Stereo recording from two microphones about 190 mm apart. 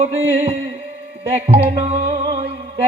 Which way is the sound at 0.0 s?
35° right (ahead or behind).